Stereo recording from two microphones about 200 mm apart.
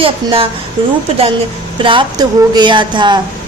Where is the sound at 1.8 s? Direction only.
25° right (ahead or behind).